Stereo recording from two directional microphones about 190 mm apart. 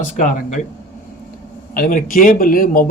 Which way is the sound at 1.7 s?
45° left (ahead or behind).